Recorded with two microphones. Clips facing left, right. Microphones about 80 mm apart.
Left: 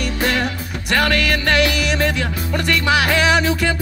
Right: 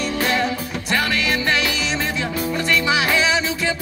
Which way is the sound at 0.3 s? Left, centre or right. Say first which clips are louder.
Even; left.